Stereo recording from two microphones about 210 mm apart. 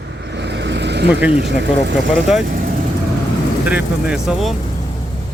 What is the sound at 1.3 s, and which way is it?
Speech, 55° right (ahead or behind).